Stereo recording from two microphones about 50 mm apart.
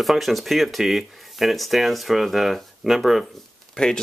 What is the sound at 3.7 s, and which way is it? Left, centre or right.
Speech, centre.